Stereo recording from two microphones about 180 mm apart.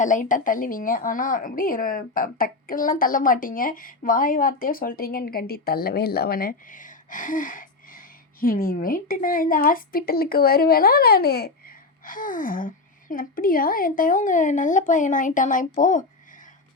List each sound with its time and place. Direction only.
0.0 s a woman's voice: 45° left (ahead or behind)